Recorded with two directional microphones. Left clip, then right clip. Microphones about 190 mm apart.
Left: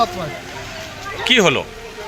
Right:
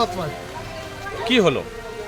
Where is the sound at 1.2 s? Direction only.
5° left (ahead or behind).